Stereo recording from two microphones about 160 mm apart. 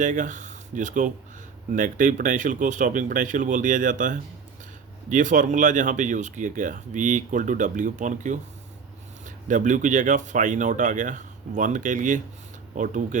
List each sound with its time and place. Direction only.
0.0 s speech: 50° right (ahead or behind)